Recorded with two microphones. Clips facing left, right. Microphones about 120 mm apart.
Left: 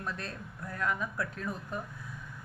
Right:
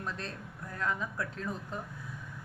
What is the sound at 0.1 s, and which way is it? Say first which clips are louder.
A woman's voice: even; 30° right (ahead or behind).